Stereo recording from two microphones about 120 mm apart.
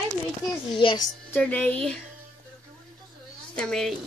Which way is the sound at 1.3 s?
15° left (ahead or behind).